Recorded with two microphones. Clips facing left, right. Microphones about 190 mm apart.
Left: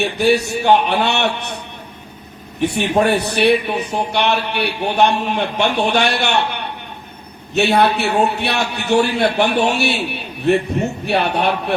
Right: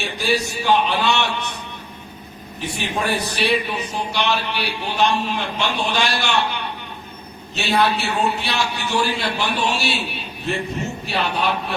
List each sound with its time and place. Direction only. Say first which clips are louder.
0.0 s a man's voice: left 7 dB; 65° left (ahead or behind)
2.6 s a man's voice: left 9 dB; 65° left (ahead or behind)